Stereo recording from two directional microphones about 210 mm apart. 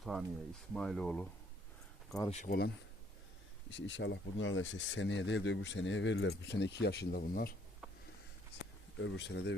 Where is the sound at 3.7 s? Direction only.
60° left (ahead or behind).